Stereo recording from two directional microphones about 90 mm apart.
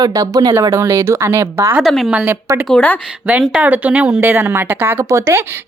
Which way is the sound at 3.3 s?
15° right (ahead or behind).